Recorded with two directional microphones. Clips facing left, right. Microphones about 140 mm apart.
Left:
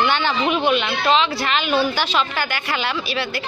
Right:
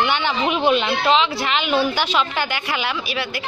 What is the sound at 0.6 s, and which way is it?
Speech, 30° right (ahead or behind).